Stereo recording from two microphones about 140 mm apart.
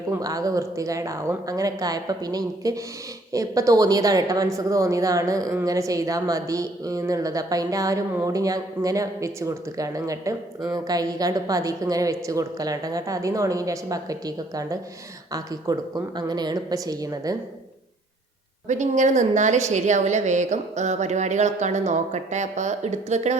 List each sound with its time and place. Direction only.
0.1 s speech: 25° right (ahead or behind)
18.7 s a woman's voice: 60° right (ahead or behind)